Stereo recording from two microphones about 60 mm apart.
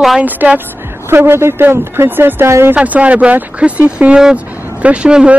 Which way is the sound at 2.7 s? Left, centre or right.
Right.